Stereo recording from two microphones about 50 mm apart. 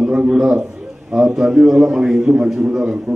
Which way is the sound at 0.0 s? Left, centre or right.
Centre.